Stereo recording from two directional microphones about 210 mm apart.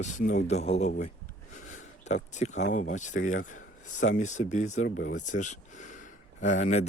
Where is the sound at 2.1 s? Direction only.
35° left (ahead or behind).